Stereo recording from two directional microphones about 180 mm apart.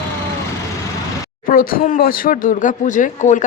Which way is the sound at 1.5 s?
50° left (ahead or behind).